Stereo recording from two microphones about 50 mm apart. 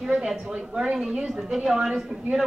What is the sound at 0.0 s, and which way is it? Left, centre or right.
A woman's voice, centre.